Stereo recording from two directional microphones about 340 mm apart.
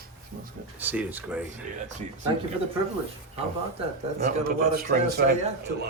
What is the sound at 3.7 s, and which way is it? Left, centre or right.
A man's voice, right.